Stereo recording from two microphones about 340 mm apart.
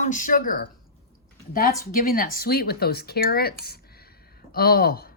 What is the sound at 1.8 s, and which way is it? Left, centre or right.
A woman's voice, left.